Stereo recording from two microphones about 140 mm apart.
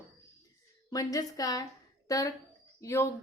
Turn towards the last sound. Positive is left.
turn(degrees=20)  # may be behind; listen again after turning